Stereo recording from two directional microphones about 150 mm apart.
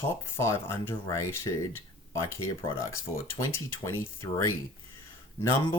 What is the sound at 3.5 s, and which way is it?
Speech, 20° left (ahead or behind).